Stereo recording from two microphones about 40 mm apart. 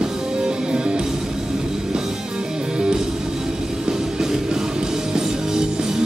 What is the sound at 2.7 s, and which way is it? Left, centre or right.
Music, centre.